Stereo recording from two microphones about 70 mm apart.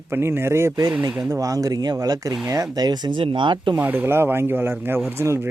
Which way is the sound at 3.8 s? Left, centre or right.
Right.